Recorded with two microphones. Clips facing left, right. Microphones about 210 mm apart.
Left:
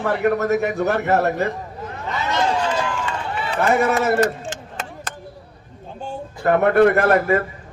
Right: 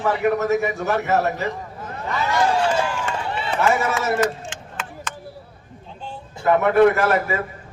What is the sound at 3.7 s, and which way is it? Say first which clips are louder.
Speech: left 7 dB; 60° left (ahead or behind).